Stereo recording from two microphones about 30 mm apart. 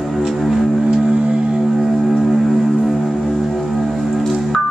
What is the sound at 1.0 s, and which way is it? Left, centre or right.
Music, right.